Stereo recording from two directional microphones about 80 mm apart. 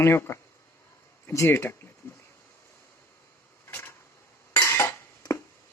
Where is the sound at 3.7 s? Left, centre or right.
Left.